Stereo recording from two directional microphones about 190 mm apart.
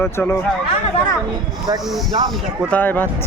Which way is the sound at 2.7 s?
10° left (ahead or behind).